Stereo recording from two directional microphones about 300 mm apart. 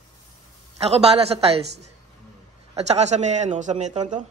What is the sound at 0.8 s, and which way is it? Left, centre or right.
Speech, centre.